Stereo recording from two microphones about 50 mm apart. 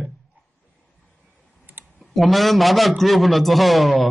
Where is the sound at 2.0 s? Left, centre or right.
Centre.